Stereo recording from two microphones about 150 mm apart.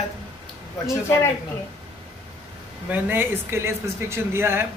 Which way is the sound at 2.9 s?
15° right (ahead or behind).